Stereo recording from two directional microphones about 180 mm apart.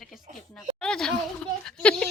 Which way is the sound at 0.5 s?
5° left (ahead or behind).